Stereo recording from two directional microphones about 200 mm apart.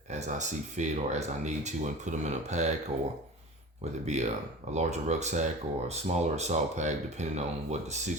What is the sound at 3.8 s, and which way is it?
Speech, 35° right (ahead or behind).